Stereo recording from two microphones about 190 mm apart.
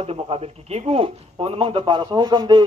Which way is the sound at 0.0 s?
35° right (ahead or behind).